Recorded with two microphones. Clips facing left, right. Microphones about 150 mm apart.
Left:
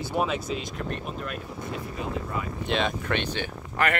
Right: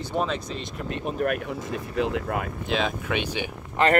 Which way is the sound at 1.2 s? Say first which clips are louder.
Right 8 dB; 70° right (ahead or behind).